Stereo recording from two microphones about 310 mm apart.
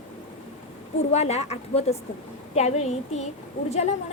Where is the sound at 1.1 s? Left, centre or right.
Left.